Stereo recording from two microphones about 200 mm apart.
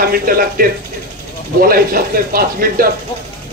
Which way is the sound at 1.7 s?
45° right (ahead or behind).